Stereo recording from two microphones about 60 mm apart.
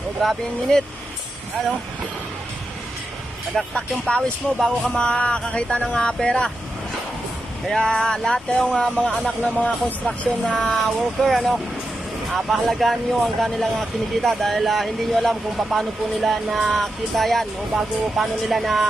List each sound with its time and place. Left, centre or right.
0.2 s speech: centre
3.8 s speech: centre
7.7 s speech: centre
10.5 s speech: centre
10.9 s speech: centre